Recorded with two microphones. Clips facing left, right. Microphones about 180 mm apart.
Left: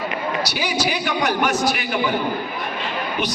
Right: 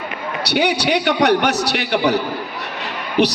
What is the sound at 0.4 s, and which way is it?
A man's voice, 65° right (ahead or behind).